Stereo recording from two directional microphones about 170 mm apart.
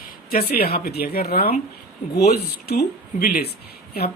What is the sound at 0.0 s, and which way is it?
Speech, 60° left (ahead or behind).